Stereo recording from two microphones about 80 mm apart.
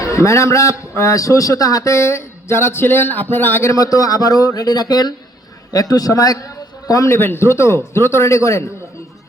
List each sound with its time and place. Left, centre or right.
0.0 s a man's voice: left
3.7 s a man's voice: left
7.1 s a man's voice: left